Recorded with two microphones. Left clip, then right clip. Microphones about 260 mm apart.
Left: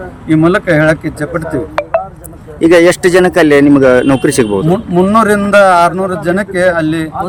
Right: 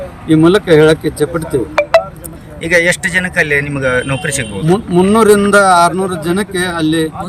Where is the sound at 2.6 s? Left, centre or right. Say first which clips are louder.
Left 5 dB; centre.